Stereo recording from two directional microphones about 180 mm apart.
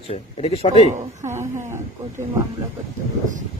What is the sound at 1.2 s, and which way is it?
Speech, 15° right (ahead or behind).